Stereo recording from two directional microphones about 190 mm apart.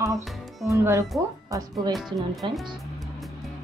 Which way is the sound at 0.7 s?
15° right (ahead or behind).